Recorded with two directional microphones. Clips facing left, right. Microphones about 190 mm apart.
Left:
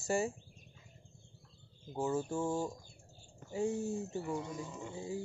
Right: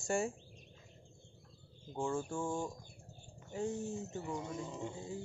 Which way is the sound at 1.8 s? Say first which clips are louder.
Left 2 dB; 5° left (ahead or behind).